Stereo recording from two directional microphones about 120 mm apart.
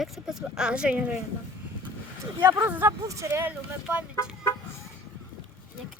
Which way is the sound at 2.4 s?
30° right (ahead or behind).